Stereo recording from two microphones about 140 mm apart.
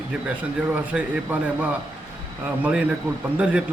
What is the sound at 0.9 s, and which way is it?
Speech, 10° right (ahead or behind).